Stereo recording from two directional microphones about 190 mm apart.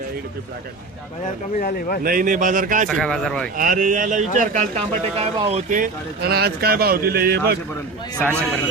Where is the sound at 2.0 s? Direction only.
45° right (ahead or behind).